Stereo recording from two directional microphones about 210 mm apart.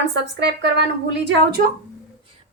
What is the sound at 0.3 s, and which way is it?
A woman's voice, 55° right (ahead or behind).